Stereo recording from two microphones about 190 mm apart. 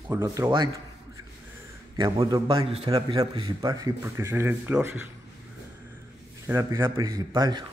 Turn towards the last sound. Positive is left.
turn(degrees=-20)  # may be behind; listen again after turning